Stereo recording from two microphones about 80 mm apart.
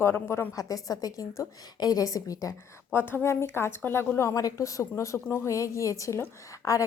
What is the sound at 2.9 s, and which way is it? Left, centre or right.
A woman's voice, left.